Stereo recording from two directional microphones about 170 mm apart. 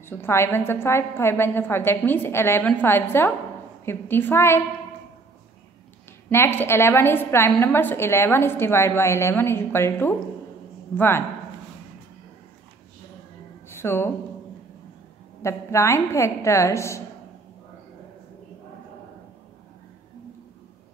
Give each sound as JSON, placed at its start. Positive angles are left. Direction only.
{"t": 0.0, "sound": "a woman's voice", "side_deg": 15}
{"t": 6.3, "sound": "a woman's voice", "side_deg": 15}
{"t": 13.7, "sound": "speech", "side_deg": 15}
{"t": 15.4, "sound": "a woman's voice", "side_deg": 15}